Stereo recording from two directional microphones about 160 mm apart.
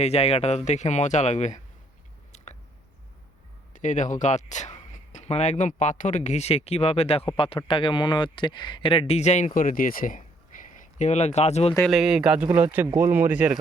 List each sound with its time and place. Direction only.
0.0 s speech: 40° left (ahead or behind)
2.3 s a sound: 45° left (ahead or behind)
3.7 s speech: 50° left (ahead or behind)
10.8 s speech: 50° left (ahead or behind)
11.9 s speech: centre (ahead or behind)